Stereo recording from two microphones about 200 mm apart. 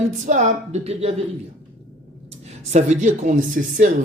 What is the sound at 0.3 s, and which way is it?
Speech, 35° right (ahead or behind).